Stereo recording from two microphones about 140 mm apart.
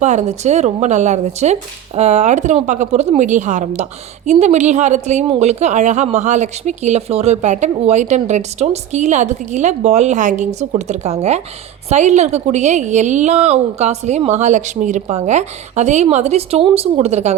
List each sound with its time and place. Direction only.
0.0 s a woman's voice: 60° right (ahead or behind)